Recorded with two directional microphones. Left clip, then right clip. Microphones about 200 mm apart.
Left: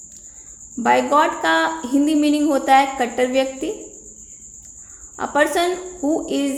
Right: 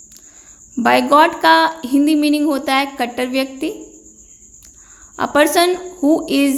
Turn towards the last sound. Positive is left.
turn(degrees=-35)  # may be behind; listen again after turning